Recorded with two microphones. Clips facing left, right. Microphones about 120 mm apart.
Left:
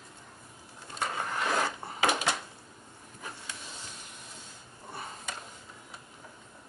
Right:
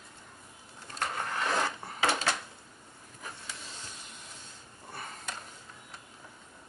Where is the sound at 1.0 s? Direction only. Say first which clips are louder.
Left 1 dB; 10° left (ahead or behind).